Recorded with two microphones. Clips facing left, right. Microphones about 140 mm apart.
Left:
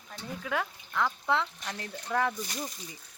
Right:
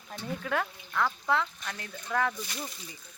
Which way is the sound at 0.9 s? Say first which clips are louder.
Even; 20° left (ahead or behind).